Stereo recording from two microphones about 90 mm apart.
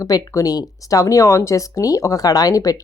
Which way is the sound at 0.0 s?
40° left (ahead or behind).